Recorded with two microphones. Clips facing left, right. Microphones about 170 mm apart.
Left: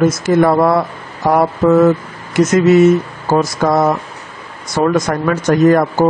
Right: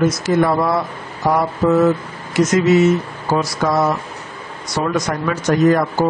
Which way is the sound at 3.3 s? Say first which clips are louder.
Left 4 dB; 50° left (ahead or behind).